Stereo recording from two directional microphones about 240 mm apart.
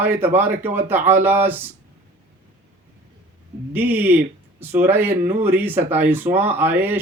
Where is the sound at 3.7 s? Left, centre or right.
Centre.